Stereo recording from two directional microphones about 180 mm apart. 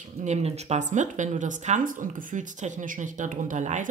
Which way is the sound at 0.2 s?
40° right (ahead or behind).